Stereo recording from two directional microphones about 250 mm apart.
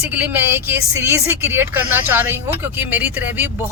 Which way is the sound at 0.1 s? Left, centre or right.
Centre.